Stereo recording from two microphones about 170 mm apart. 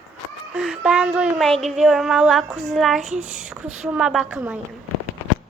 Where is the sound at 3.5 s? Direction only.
5° right (ahead or behind).